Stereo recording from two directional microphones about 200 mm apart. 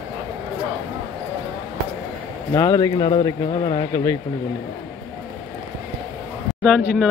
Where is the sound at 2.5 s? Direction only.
15° left (ahead or behind).